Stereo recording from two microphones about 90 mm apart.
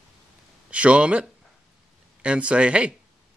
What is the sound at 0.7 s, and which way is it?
Speech, 15° right (ahead or behind).